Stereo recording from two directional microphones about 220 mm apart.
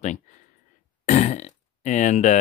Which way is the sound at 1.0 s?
30° left (ahead or behind).